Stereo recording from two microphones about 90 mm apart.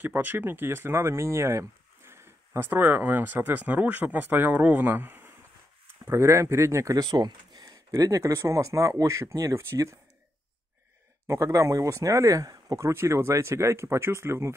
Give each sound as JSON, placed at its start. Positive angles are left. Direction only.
{"t": 0.0, "sound": "speech", "side_deg": -20}
{"t": 11.2, "sound": "speech", "side_deg": -35}